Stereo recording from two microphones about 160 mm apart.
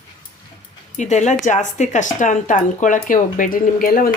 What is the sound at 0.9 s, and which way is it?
Speech, 45° left (ahead or behind).